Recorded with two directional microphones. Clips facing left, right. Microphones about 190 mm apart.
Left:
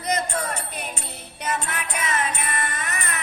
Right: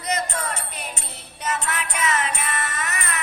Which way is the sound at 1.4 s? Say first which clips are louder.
Right 1 dB; 30° left (ahead or behind).